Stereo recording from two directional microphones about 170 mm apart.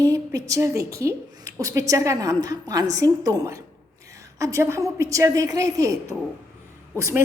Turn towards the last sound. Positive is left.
turn(degrees=-15)  # may be behind; listen again after turning